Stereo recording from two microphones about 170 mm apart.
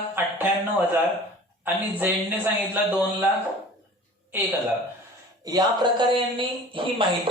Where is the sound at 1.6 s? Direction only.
10° right (ahead or behind).